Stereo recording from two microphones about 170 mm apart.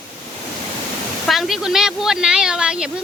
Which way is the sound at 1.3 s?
Centre (ahead or behind).